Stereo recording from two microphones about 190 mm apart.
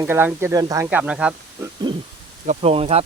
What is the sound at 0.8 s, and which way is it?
Speech, 5° right (ahead or behind).